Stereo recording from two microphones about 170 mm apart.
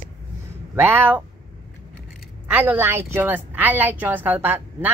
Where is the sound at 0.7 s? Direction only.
10° right (ahead or behind).